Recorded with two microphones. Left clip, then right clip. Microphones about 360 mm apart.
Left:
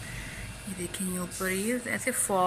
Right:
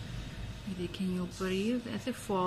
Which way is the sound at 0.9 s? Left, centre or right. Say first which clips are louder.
Left 3 dB; centre.